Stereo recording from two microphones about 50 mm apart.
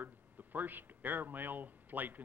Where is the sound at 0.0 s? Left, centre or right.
Right.